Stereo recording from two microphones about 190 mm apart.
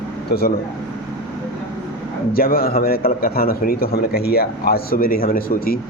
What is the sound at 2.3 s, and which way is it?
A man's voice, 55° left (ahead or behind).